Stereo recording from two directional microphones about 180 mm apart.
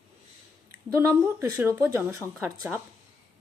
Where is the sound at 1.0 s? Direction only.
15° right (ahead or behind).